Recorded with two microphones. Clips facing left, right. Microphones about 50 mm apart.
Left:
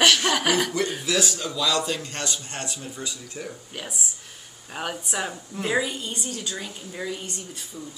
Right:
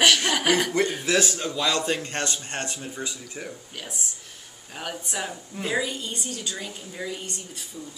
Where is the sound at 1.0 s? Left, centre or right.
Right.